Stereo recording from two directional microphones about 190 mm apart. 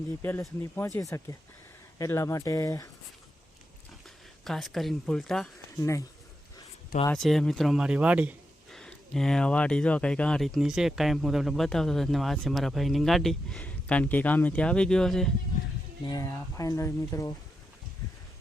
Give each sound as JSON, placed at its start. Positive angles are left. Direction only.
{"t": 0.2, "sound": "speech", "side_deg": 10}
{"t": 4.4, "sound": "speech", "side_deg": 0}
{"t": 5.7, "sound": "speech", "side_deg": 15}
{"t": 7.1, "sound": "speech", "side_deg": 0}
{"t": 16.0, "sound": "speech", "side_deg": 20}